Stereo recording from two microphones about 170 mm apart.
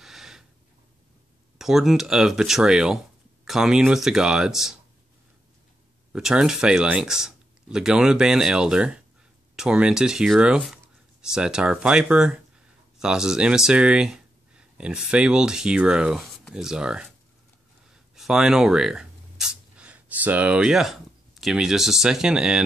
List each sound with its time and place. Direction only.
0.0 s snort: centre (ahead or behind)
1.6 s speech: centre (ahead or behind)
6.1 s speech: 5° right (ahead or behind)
18.1 s speech: centre (ahead or behind)